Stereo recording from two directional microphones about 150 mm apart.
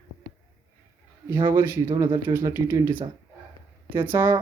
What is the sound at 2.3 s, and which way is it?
Speech, 15° right (ahead or behind).